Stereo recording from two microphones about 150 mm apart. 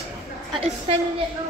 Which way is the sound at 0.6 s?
40° right (ahead or behind).